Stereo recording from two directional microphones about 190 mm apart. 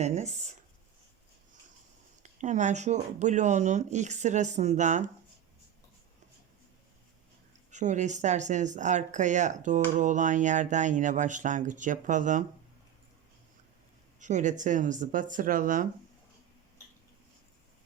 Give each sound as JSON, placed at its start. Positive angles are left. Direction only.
{"t": 0.0, "sound": "speech", "side_deg": -35}
{"t": 2.2, "sound": "speech", "side_deg": -40}
{"t": 7.7, "sound": "speech", "side_deg": -40}
{"t": 14.2, "sound": "speech", "side_deg": -40}